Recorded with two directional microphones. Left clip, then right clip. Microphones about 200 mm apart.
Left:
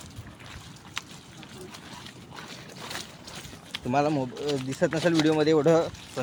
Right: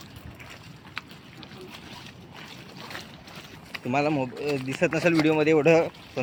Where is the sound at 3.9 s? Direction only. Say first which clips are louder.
Even; 15° left (ahead or behind).